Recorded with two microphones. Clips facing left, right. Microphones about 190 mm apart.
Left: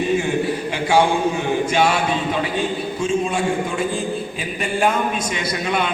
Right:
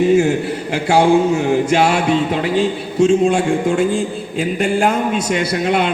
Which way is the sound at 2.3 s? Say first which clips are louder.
Right 5 dB; 75° right (ahead or behind).